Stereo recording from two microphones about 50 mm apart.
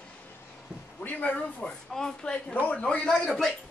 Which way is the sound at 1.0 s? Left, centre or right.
Left.